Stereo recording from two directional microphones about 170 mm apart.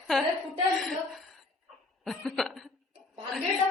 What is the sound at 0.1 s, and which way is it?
A woman's voice, centre (ahead or behind).